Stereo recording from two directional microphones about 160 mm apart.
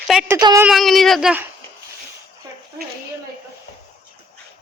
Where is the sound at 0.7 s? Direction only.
Centre (ahead or behind).